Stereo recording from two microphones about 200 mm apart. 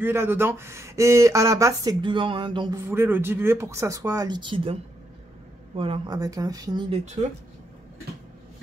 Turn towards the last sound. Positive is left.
turn(degrees=-20)  # may be behind; listen again after turning